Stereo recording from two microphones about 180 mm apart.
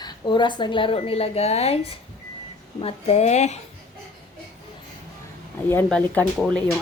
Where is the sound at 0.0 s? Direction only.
25° left (ahead or behind).